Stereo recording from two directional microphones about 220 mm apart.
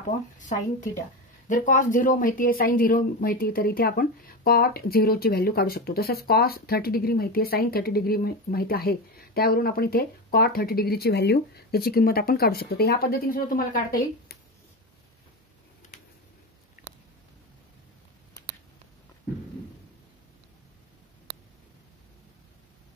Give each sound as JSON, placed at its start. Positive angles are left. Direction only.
{"t": 0.4, "sound": "speech", "side_deg": 35}
{"t": 16.8, "sound": "chewing", "side_deg": 40}